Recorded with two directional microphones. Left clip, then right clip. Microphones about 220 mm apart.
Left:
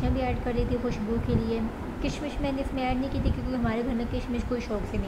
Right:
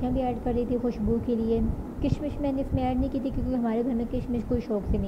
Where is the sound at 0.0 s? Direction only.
15° right (ahead or behind).